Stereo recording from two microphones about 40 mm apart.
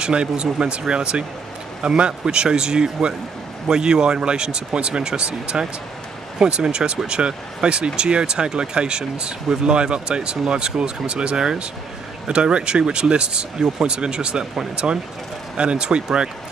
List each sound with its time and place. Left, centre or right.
0.0 s speech: right